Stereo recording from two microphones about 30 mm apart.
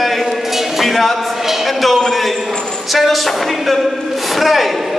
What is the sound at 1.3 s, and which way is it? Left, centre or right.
Speech, centre.